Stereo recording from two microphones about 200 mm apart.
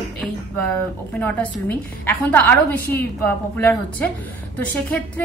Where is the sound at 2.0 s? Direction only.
10° left (ahead or behind).